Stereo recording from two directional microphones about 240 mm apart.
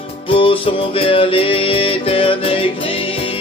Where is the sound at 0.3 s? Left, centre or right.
Left.